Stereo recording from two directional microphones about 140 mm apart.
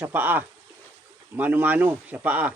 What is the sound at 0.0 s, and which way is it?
Speech, 10° right (ahead or behind).